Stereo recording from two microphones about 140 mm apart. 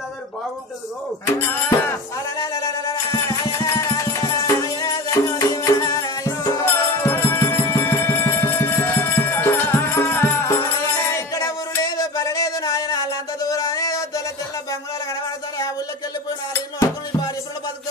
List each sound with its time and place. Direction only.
1.2 s speech: 15° left (ahead or behind)
2.3 s music: 25° left (ahead or behind)
6.6 s music: 15° left (ahead or behind)